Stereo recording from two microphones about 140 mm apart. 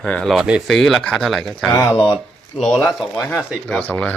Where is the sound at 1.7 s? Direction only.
25° left (ahead or behind).